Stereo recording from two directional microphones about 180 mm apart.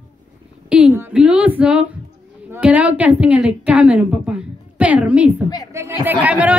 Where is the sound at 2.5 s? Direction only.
10° right (ahead or behind).